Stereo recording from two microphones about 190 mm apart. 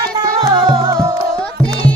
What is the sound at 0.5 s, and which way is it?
Music, 20° right (ahead or behind).